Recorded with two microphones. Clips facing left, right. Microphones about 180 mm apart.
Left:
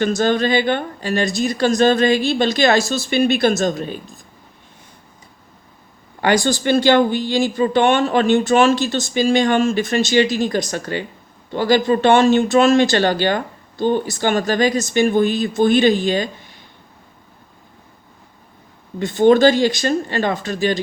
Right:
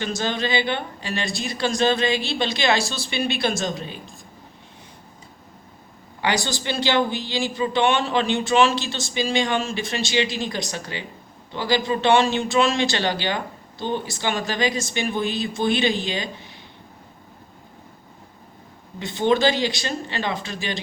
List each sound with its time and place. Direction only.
0.0 s speech: 50° left (ahead or behind)
6.2 s speech: 45° left (ahead or behind)
18.9 s speech: 50° left (ahead or behind)